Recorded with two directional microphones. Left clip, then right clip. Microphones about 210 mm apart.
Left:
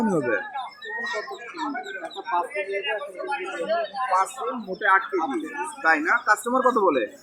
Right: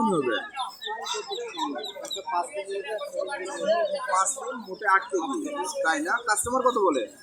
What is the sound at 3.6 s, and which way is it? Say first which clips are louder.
Speech: right 3 dB; 55° right (ahead or behind).